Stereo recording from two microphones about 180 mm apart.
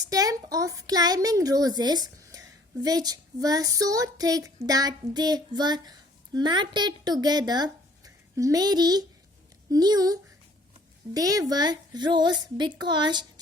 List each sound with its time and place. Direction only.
0.0 s child singing: 20° right (ahead or behind)
5.5 s a woman's voice: 25° right (ahead or behind)
9.6 s child singing: 20° right (ahead or behind)